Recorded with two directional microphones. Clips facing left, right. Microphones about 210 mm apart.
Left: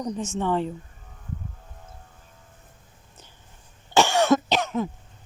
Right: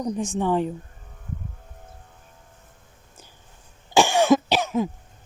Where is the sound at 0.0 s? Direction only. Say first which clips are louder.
Right 3 dB; 15° right (ahead or behind).